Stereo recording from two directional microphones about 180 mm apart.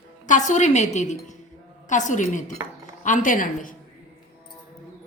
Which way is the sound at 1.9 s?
45° left (ahead or behind).